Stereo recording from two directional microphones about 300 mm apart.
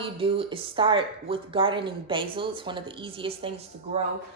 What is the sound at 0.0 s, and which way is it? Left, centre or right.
Speech, centre.